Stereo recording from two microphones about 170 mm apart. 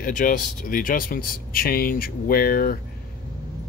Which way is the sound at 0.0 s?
50° left (ahead or behind).